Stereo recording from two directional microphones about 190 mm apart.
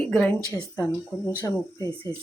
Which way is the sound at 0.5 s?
20° left (ahead or behind).